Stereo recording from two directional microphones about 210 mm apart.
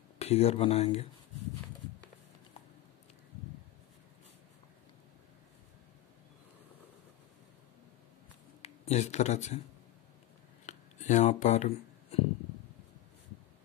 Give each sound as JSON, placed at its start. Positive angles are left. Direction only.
{"t": 0.2, "sound": "speech", "side_deg": 30}
{"t": 8.6, "sound": "speech", "side_deg": 30}
{"t": 10.6, "sound": "a sound", "side_deg": 35}